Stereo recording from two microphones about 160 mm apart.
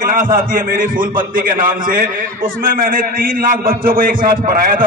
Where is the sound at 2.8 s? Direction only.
60° right (ahead or behind).